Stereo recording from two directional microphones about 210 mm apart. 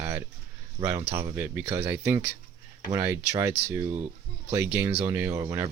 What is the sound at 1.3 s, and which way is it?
Speech, 10° right (ahead or behind).